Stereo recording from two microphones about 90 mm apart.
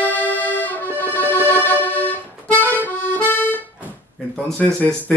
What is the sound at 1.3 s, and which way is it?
Accordion, 20° left (ahead or behind).